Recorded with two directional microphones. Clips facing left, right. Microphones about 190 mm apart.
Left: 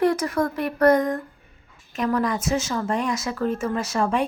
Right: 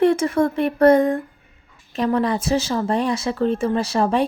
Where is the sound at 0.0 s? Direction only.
25° right (ahead or behind).